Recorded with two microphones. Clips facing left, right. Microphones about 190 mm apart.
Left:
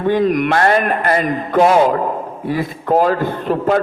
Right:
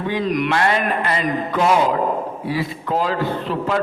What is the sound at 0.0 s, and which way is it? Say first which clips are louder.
A man's voice: left 6 dB; 50° left (ahead or behind).